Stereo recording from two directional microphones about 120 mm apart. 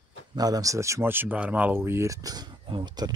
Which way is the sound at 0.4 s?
30° right (ahead or behind).